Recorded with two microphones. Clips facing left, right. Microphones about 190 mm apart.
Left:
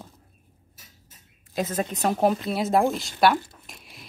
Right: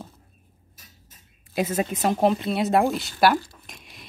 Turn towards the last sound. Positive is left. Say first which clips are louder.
# right 1 dB
turn(degrees=0)  # may be behind; listen again after turning